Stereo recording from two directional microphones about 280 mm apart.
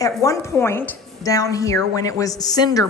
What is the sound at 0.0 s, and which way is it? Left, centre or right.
A woman's voice, centre.